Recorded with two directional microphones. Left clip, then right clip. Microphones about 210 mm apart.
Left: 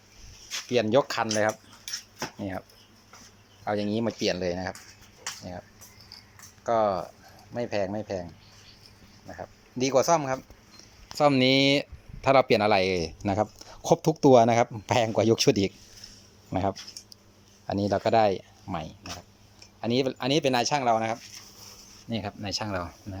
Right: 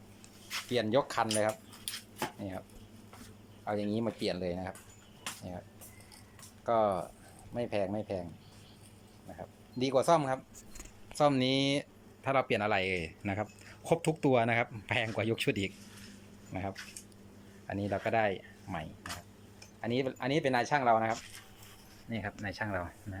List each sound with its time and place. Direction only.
0.7 s speech: 5° left (ahead or behind)
6.7 s speech: centre (ahead or behind)
9.4 s speech: centre (ahead or behind)